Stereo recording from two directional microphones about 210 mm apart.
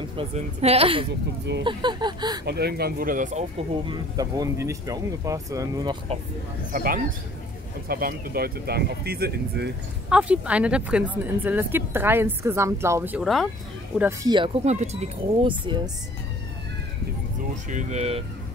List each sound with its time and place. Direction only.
0.2 s speech: 30° right (ahead or behind)
2.4 s speech: 50° right (ahead or behind)
3.8 s speech: 20° right (ahead or behind)
6.7 s speech: 40° right (ahead or behind)
10.0 s speech: 5° right (ahead or behind)
13.9 s speech: 10° right (ahead or behind)
14.3 s speech: 25° right (ahead or behind)
17.6 s speech: 35° right (ahead or behind)